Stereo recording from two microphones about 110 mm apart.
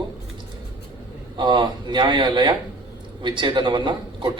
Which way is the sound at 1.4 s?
40° right (ahead or behind).